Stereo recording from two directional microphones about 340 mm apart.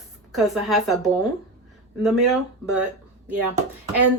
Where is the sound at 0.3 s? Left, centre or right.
Centre.